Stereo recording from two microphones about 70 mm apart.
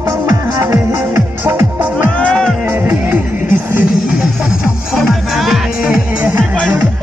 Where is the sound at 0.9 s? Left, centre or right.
Right.